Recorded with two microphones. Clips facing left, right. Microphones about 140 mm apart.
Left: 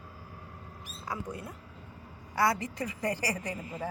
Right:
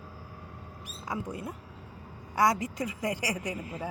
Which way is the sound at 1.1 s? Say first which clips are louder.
Right 3 dB; 20° right (ahead or behind).